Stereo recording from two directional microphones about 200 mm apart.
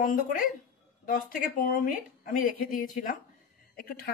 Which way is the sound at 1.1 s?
40° left (ahead or behind).